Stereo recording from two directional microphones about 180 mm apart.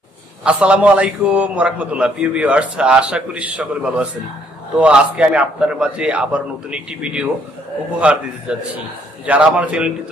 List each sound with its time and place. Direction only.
0.4 s a man's voice: 5° right (ahead or behind)